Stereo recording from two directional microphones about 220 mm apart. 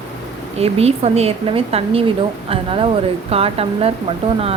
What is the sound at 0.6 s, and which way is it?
A woman's voice, 25° right (ahead or behind).